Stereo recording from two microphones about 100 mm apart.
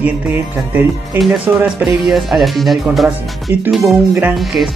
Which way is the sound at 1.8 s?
5° right (ahead or behind).